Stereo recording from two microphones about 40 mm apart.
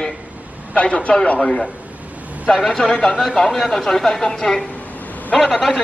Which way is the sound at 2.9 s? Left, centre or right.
Left.